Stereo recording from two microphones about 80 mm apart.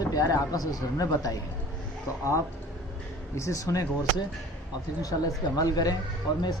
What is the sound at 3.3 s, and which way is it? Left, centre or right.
Speech, left.